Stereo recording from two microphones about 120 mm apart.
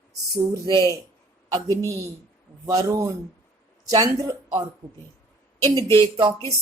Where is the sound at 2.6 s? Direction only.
30° right (ahead or behind).